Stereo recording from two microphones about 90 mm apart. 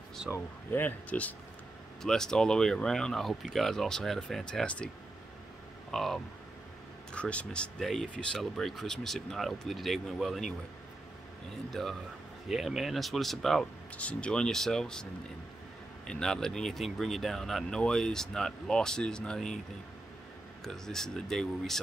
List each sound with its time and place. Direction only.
0.7 s speech: 20° left (ahead or behind)
2.0 s speech: 5° left (ahead or behind)
11.8 s speech: centre (ahead or behind)
16.1 s speech: 5° left (ahead or behind)
20.6 s speech: 5° left (ahead or behind)